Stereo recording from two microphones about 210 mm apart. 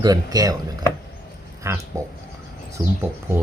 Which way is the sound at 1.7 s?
15° right (ahead or behind).